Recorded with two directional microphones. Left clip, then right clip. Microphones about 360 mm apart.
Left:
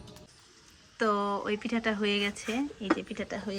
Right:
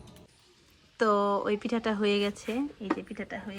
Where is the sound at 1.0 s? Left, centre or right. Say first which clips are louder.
Right 3 dB; centre.